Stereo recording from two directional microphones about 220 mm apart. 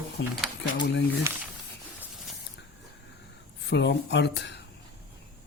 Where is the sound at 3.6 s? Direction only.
50° left (ahead or behind).